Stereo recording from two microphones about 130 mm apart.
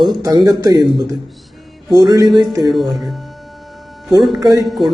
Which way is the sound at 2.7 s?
Centre (ahead or behind).